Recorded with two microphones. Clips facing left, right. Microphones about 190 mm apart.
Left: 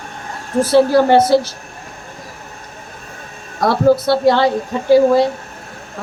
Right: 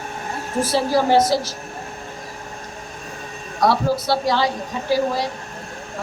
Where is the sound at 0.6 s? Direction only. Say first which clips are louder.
Left 8 dB; 60° left (ahead or behind).